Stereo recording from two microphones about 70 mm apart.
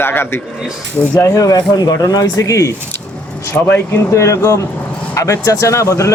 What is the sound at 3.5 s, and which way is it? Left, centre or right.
Speech, left.